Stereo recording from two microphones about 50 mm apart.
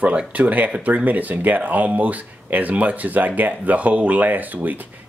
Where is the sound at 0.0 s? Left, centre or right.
Right.